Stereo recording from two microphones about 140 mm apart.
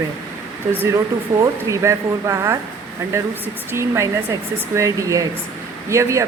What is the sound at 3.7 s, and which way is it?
Speech, 20° right (ahead or behind).